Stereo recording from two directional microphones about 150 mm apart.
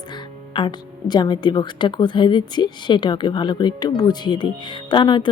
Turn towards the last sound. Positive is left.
turn(degrees=30)  # may be behind; listen again after turning